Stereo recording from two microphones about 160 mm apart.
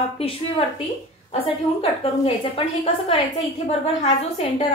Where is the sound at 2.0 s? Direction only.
40° left (ahead or behind).